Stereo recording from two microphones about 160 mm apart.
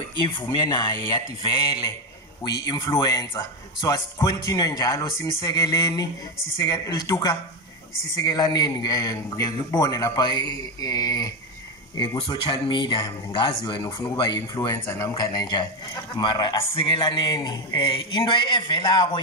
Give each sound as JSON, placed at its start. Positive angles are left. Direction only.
{"t": 0.4, "sound": "speech", "side_deg": 25}
{"t": 2.6, "sound": "speech", "side_deg": 20}